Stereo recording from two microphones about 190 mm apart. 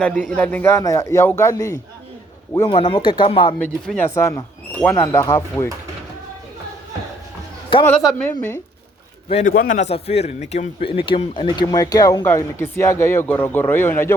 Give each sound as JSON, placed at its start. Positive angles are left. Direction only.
{"t": 0.3, "sound": "a man's voice", "side_deg": 10}
{"t": 3.8, "sound": "a man's voice", "side_deg": 10}
{"t": 4.8, "sound": "a man's voice", "side_deg": 5}
{"t": 7.9, "sound": "a man's voice", "side_deg": 5}
{"t": 9.3, "sound": "a man's voice", "side_deg": 45}